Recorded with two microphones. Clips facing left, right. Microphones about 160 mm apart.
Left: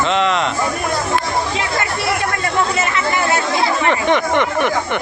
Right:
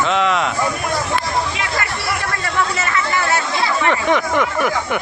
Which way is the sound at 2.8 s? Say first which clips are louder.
Left 2 dB; 20° left (ahead or behind).